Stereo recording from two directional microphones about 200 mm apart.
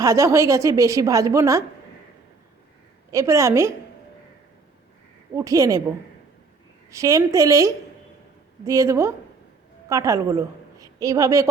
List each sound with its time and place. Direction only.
0.0 s a woman's voice: 15° right (ahead or behind)
3.1 s a woman's voice: 15° right (ahead or behind)
5.3 s a woman's voice: 15° right (ahead or behind)
6.9 s a woman's voice: 15° right (ahead or behind)